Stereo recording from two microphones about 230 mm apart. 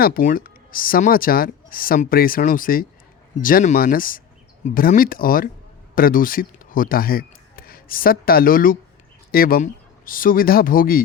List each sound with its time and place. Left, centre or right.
0.0 s speech: left